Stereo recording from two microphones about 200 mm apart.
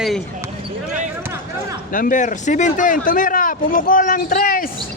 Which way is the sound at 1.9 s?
40° left (ahead or behind).